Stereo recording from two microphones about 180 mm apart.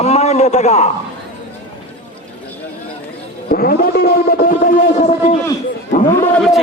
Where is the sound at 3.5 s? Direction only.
55° left (ahead or behind).